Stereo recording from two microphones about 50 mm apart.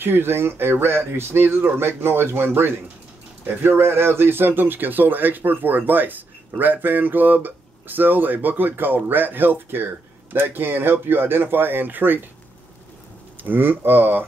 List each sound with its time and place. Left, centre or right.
0.0 s speech: right
13.4 s speech: right